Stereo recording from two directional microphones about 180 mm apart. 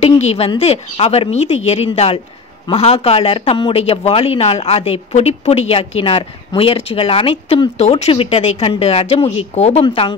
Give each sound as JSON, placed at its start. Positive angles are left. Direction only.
{"t": 0.0, "sound": "a woman's voice", "side_deg": 35}